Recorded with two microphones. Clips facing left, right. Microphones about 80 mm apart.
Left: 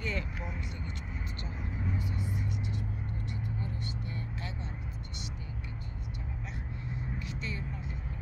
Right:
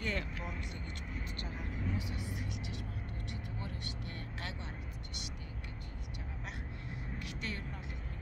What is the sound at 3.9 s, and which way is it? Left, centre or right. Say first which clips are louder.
Speech: left 5 dB; right.